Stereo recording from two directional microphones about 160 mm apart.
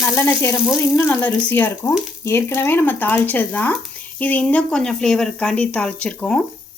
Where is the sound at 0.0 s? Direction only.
15° left (ahead or behind).